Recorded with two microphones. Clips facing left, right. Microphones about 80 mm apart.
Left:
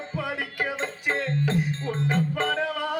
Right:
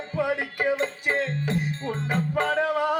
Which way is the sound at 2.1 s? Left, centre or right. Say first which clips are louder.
Right 1 dB; centre.